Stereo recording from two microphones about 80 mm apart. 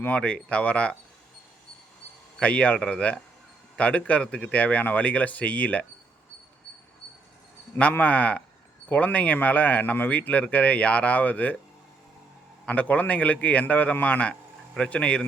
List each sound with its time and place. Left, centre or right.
0.0 s speech: centre
2.4 s speech: centre
7.8 s speech: centre
12.6 s speech: centre